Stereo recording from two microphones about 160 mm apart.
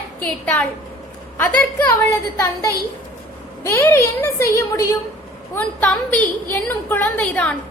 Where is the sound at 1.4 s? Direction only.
10° left (ahead or behind).